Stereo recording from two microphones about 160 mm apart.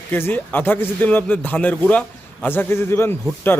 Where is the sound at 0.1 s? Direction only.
10° left (ahead or behind).